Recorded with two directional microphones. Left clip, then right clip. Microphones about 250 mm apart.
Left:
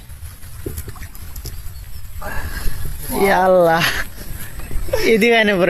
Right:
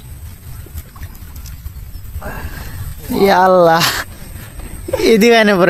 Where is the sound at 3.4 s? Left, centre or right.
Centre.